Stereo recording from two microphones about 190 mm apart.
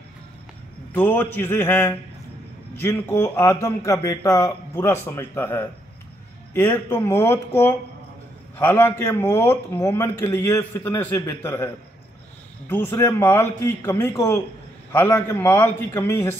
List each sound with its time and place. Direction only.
0.9 s a man's voice: 10° left (ahead or behind)